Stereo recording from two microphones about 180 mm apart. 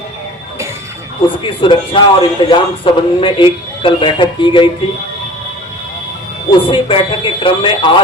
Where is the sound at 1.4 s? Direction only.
30° left (ahead or behind).